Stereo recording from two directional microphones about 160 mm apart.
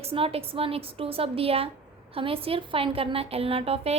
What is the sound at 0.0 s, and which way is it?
A woman's voice, 35° right (ahead or behind).